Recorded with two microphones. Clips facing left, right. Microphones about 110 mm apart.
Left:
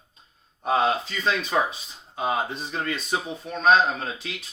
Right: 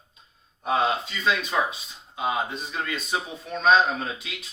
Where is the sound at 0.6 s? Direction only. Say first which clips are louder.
Left 1 dB; 35° left (ahead or behind).